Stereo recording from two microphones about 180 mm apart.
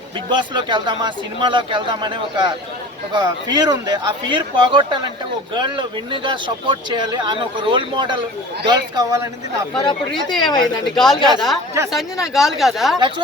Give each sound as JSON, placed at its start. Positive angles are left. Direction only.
{"t": 0.3, "sound": "speech", "side_deg": -25}
{"t": 9.8, "sound": "speech", "side_deg": 25}
{"t": 10.8, "sound": "speech", "side_deg": 0}
{"t": 13.0, "sound": "speech", "side_deg": -25}